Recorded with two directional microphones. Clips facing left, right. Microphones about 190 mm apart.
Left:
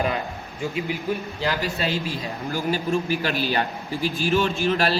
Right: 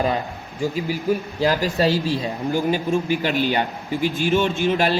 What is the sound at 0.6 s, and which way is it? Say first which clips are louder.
A man's voice: right 4 dB; 35° right (ahead or behind).